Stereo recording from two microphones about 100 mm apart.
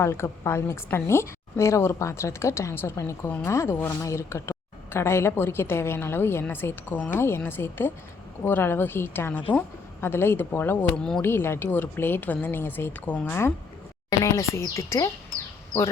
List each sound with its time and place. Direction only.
0.0 s a woman's voice: 25° left (ahead or behind)
3.2 s speech: 15° left (ahead or behind)
3.5 s a woman's voice: 25° left (ahead or behind)
10.9 s speech: 5° left (ahead or behind)
11.2 s a woman's voice: 25° left (ahead or behind)
14.1 s speech: 35° left (ahead or behind)